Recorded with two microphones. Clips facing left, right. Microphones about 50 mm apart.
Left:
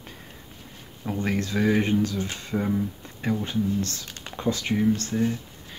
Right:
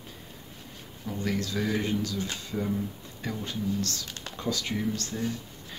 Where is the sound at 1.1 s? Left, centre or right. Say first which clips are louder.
Left 4 dB; left.